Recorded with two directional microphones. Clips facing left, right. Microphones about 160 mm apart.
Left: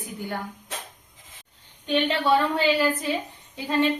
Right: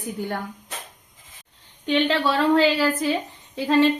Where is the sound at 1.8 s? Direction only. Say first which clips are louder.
Right 1 dB; 90° right.